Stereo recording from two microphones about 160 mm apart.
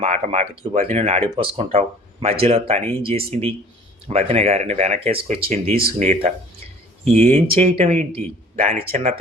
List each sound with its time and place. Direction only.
0.0 s speech: 40° right (ahead or behind)